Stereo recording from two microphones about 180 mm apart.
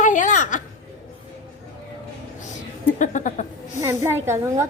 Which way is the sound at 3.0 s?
45° left (ahead or behind).